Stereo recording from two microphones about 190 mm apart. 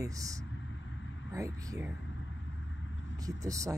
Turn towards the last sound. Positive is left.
turn(degrees=-15)  # may be behind; listen again after turning